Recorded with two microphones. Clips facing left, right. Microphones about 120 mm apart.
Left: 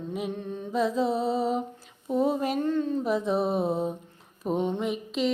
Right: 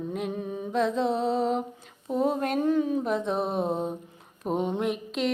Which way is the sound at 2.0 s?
Centre (ahead or behind).